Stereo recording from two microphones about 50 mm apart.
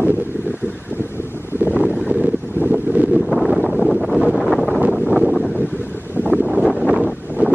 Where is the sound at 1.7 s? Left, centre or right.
Right.